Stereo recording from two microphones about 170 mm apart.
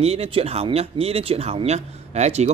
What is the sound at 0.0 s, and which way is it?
Speech, 35° right (ahead or behind).